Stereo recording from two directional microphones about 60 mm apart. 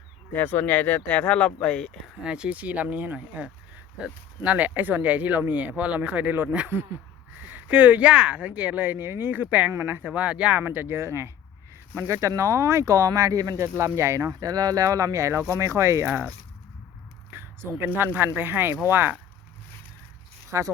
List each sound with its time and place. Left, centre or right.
0.3 s speech: left
1.3 s speech: left
2.2 s speech: centre; by 9.3 s right
9.3 s speech: right
10.1 s speech: right
10.6 s speech: right
11.9 s speech: right
13.6 s speech: right
17.3 s speech: right
20.5 s speech: right